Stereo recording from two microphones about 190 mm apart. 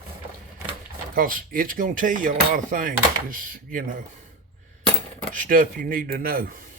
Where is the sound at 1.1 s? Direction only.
50° right (ahead or behind).